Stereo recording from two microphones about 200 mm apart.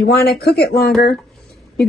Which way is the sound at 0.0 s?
50° left (ahead or behind).